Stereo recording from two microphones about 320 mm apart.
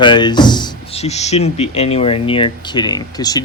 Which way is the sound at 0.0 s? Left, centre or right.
Centre.